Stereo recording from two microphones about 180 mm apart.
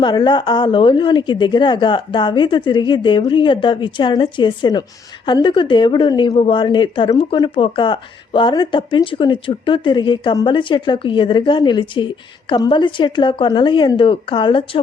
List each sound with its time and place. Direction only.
0.0 s a woman's voice: 25° left (ahead or behind)